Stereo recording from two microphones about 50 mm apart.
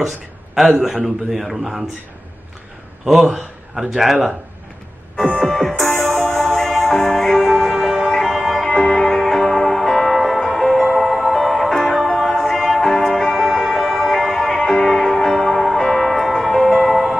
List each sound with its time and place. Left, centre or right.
0.8 s a man's voice: centre
3.7 s a man's voice: centre
5.1 s music: left
5.4 s music: centre
8.1 s music: centre
12.1 s music: centre